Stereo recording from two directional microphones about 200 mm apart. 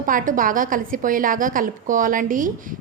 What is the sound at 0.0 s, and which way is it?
A woman's voice, 40° right (ahead or behind).